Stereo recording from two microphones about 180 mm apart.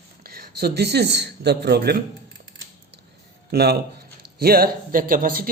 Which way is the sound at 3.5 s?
60° right (ahead or behind).